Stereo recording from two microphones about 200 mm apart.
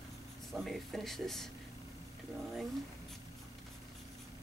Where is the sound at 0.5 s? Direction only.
Centre (ahead or behind).